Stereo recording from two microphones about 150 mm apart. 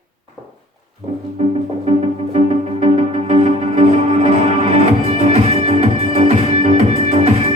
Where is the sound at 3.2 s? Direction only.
40° right (ahead or behind).